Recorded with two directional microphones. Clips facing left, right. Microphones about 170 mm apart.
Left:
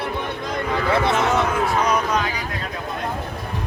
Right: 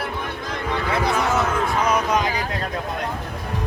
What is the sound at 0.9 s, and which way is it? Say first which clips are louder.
Speech: left 3 dB; 25° left (ahead or behind).